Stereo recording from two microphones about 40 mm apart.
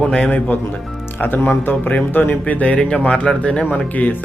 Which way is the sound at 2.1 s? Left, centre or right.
Left.